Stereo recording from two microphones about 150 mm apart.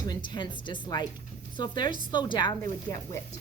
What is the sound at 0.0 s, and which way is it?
A woman's voice, 30° left (ahead or behind).